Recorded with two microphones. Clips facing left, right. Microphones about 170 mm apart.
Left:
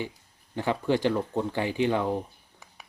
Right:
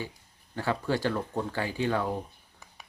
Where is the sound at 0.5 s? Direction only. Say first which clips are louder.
Left 3 dB; 20° left (ahead or behind).